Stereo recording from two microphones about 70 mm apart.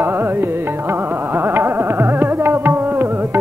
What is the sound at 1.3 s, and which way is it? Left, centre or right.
Carnatic music, right.